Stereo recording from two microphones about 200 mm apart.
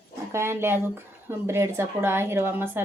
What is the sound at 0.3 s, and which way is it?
Speech, 10° right (ahead or behind).